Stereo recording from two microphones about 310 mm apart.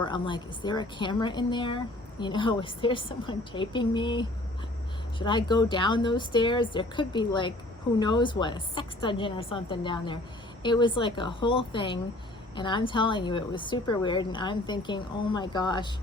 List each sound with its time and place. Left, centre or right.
0.0 s a woman's voice: centre